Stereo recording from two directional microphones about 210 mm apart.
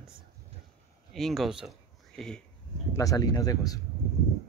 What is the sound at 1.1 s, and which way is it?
Speech, centre (ahead or behind).